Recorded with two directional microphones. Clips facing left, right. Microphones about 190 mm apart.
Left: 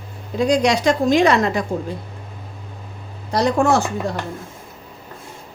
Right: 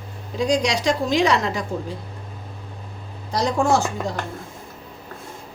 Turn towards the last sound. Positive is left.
turn(degrees=60)  # may be behind; listen again after turning